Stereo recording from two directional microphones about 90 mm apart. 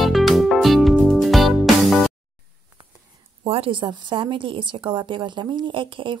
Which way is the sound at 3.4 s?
90° right.